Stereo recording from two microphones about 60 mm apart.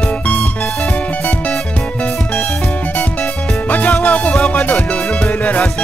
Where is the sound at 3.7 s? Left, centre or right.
Left.